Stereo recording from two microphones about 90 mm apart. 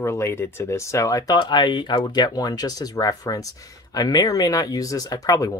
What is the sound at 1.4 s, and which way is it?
Speech, 55° left (ahead or behind).